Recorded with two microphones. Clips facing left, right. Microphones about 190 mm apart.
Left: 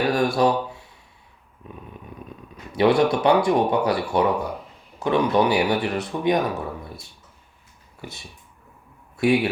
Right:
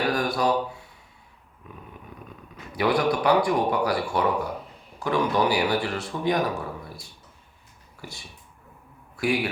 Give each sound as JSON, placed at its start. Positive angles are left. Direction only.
{"t": 0.1, "sound": "mantra", "side_deg": 25}
{"t": 1.6, "sound": "speech", "side_deg": 25}
{"t": 8.0, "sound": "a man's voice", "side_deg": 20}